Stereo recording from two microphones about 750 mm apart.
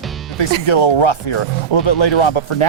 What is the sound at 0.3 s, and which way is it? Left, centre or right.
Speech, left.